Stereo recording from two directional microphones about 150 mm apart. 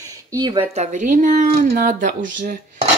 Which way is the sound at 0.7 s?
50° right (ahead or behind).